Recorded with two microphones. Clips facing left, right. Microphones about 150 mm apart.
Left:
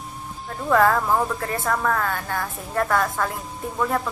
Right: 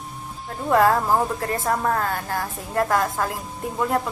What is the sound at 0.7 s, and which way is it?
A woman's voice, 30° right (ahead or behind).